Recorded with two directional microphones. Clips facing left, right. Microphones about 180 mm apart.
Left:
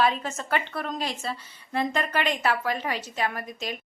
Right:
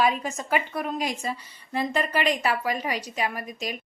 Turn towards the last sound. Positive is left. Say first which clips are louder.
# right 1 dB
turn(degrees=-10)  # may be behind; listen again after turning